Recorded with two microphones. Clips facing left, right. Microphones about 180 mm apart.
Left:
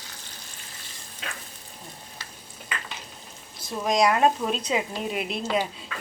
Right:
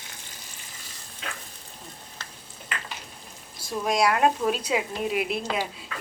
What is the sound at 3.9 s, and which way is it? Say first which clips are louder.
A woman's voice: left 1 dB; 5° right (ahead or behind).